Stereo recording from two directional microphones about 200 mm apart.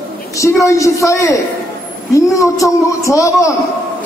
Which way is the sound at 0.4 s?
15° left (ahead or behind).